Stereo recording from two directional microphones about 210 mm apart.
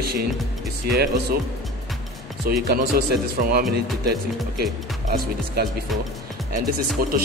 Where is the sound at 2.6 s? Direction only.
50° right (ahead or behind).